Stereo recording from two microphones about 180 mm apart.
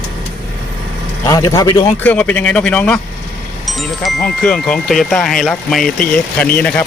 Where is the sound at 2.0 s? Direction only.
5° left (ahead or behind).